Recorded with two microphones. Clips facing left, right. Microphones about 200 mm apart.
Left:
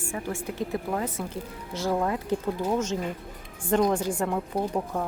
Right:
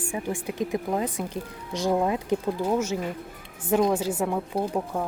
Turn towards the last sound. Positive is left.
turn(degrees=-5)  # may be behind; listen again after turning